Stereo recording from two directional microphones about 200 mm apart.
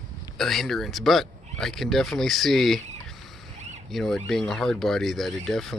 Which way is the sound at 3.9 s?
Centre (ahead or behind).